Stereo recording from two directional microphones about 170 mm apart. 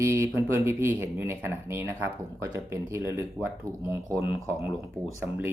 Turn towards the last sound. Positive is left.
turn(degrees=-10)  # may be behind; listen again after turning